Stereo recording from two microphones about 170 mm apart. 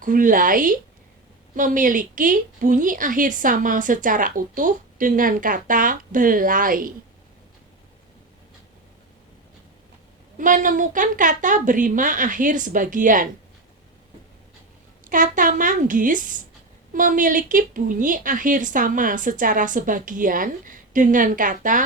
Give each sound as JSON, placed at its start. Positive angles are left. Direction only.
{"t": 0.0, "sound": "a woman's voice", "side_deg": -50}
{"t": 10.3, "sound": "a woman's voice", "side_deg": -50}
{"t": 15.0, "sound": "a woman's voice", "side_deg": -50}